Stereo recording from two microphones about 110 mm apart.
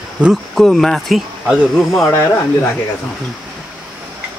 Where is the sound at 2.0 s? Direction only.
25° left (ahead or behind).